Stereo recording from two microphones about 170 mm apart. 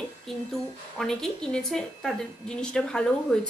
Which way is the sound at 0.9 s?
5° left (ahead or behind).